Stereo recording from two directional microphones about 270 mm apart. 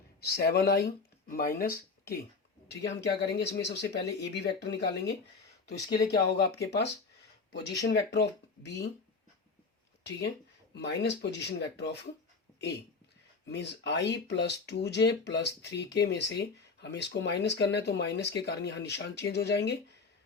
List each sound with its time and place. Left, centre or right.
0.2 s speech: left
10.8 s speech: left
13.5 s speech: left